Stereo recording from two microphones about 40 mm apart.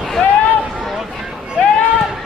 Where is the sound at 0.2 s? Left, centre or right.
Centre.